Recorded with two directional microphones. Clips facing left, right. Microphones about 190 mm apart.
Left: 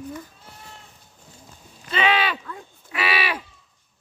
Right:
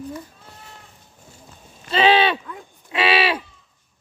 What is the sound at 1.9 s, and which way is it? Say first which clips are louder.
Speech: right 6 dB; 30° right (ahead or behind).